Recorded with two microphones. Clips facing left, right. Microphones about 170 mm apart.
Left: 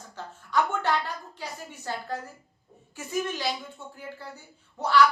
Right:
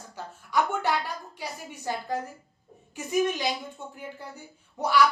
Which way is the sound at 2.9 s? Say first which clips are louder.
Right 5 dB; 15° right (ahead or behind).